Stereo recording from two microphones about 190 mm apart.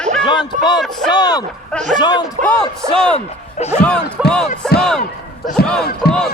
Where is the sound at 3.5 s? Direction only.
35° left (ahead or behind).